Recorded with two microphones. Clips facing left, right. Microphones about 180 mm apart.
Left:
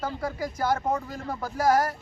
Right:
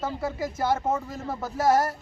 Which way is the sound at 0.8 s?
5° right (ahead or behind).